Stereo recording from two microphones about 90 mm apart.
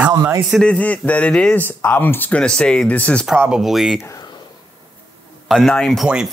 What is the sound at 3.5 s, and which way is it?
Speech, 5° right (ahead or behind).